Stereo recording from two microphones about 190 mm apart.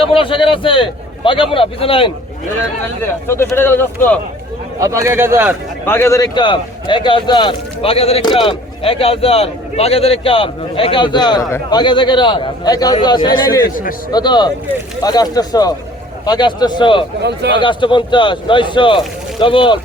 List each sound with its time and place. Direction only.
0.0 s speech: 30° left (ahead or behind)
3.0 s speech: 10° left (ahead or behind)
4.8 s speech: 15° right (ahead or behind)
5.8 s speech: 10° left (ahead or behind)
17.2 s speech: 60° right (ahead or behind)
17.5 s speech: 25° left (ahead or behind)